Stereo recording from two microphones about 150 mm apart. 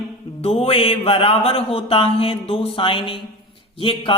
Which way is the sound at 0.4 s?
40° left (ahead or behind).